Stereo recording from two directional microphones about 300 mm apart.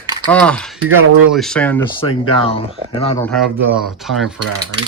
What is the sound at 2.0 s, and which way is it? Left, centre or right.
Speech, centre.